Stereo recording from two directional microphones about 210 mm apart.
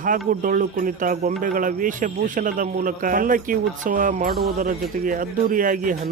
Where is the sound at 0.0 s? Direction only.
40° right (ahead or behind).